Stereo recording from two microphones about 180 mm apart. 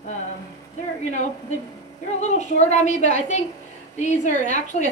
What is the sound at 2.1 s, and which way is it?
A woman's voice, 40° left (ahead or behind).